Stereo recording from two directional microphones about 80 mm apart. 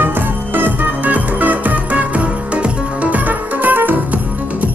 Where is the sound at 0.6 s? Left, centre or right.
Centre.